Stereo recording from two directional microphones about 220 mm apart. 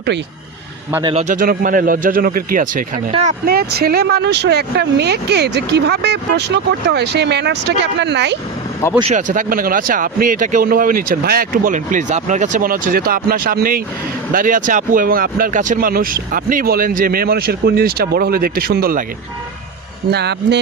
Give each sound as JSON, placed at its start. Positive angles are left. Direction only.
{"t": 1.0, "sound": "speech", "side_deg": -30}
{"t": 3.1, "sound": "speech", "side_deg": -30}
{"t": 3.4, "sound": "speech", "side_deg": -45}
{"t": 9.0, "sound": "speech", "side_deg": -30}
{"t": 20.1, "sound": "speech", "side_deg": -50}